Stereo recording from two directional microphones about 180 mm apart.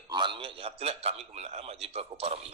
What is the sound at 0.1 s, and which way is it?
A man's voice, 25° right (ahead or behind).